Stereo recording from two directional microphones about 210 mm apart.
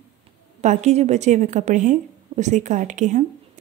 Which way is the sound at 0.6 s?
35° right (ahead or behind).